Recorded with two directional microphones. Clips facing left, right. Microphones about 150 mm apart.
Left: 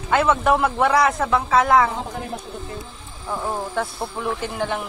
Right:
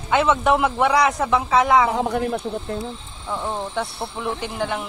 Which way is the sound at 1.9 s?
70° right (ahead or behind).